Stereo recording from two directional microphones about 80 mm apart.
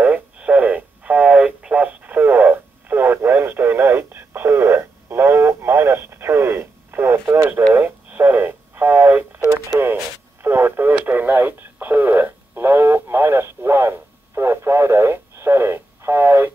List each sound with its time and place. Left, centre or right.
0.0 s radio: centre
10.4 s radio: right